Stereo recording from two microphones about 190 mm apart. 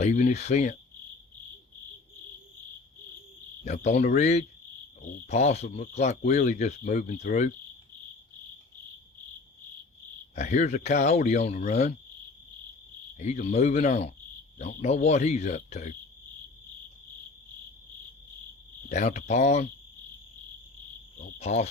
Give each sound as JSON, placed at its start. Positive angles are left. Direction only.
{"t": 0.0, "sound": "speech", "side_deg": 40}
{"t": 3.7, "sound": "speech", "side_deg": 40}
{"t": 10.3, "sound": "speech", "side_deg": 40}
{"t": 13.1, "sound": "speech", "side_deg": 40}
{"t": 18.9, "sound": "speech", "side_deg": 35}
{"t": 21.3, "sound": "speech", "side_deg": 35}